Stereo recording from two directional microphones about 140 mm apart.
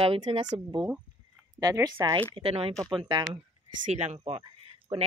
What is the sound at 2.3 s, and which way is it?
Speech, 40° right (ahead or behind).